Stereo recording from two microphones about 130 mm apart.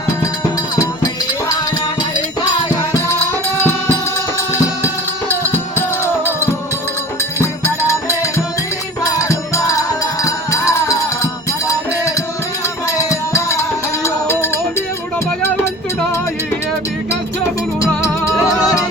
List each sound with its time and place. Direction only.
0.8 s music: 30° left (ahead or behind)
3.6 s music: 20° left (ahead or behind)
17.7 s music: 25° left (ahead or behind)